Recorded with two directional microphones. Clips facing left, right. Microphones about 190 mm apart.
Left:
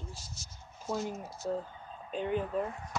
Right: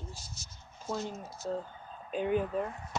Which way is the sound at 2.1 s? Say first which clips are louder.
Right 3 dB; 5° right (ahead or behind).